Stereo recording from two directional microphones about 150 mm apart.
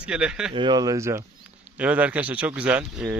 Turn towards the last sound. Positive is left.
turn(degrees=-10)  # may be behind; listen again after turning